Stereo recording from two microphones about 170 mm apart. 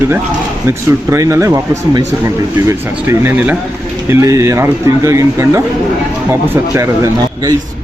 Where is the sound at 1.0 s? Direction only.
15° right (ahead or behind).